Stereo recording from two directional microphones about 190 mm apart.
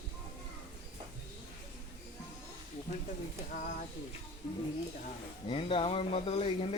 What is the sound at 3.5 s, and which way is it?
Speech, 45° left (ahead or behind).